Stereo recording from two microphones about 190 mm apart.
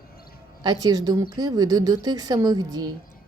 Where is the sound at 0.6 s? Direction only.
20° right (ahead or behind).